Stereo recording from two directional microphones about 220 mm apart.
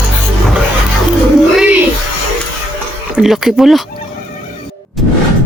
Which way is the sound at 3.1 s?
Centre (ahead or behind).